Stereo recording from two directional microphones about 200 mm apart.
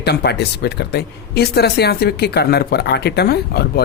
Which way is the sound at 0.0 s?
55° left (ahead or behind).